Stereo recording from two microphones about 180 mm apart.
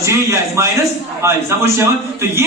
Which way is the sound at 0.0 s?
15° right (ahead or behind).